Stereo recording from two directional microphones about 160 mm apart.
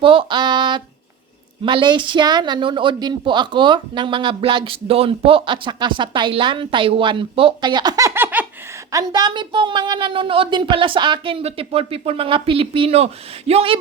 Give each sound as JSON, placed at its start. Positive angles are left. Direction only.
{"t": 0.0, "sound": "a sound", "side_deg": -35}
{"t": 1.6, "sound": "a woman's voice", "side_deg": -30}
{"t": 8.9, "sound": "a woman's voice", "side_deg": -25}